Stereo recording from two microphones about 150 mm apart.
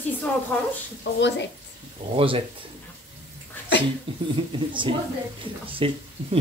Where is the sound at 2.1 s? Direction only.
35° right (ahead or behind).